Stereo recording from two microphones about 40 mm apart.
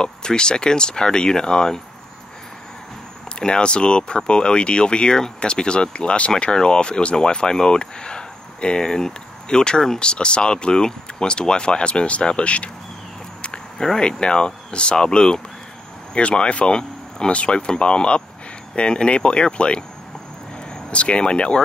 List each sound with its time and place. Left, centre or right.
0.0 s speech: centre
3.3 s speech: left
13.4 s a sound: left
13.9 s speech: left
20.9 s speech: left